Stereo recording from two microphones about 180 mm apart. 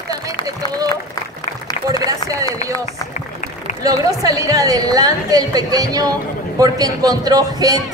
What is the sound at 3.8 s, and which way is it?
A man's voice, 20° right (ahead or behind).